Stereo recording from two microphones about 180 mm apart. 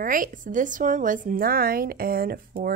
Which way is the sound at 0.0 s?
50° right (ahead or behind).